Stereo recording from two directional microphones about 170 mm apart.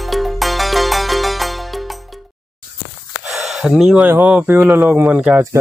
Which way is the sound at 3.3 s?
Centre (ahead or behind).